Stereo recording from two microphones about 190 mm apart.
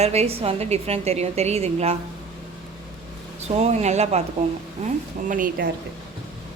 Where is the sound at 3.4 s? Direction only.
35° right (ahead or behind).